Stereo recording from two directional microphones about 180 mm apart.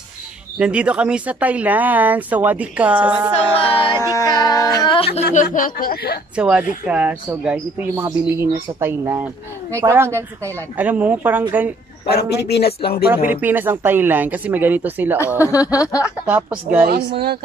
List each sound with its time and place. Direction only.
0.6 s speech: 5° right (ahead or behind)
3.3 s speech: 30° left (ahead or behind); by 6.1 s 55° left (ahead or behind)
6.3 s speech: 5° right (ahead or behind)
12.1 s speech: 65° left (ahead or behind)
13.3 s speech: 10° right (ahead or behind)
15.4 s speech: 20° left (ahead or behind)
16.0 s speech: 10° right (ahead or behind)
16.8 s a woman's voice: 60° right (ahead or behind)